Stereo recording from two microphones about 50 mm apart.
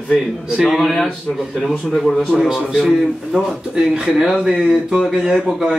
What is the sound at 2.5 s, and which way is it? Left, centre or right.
Speech, centre.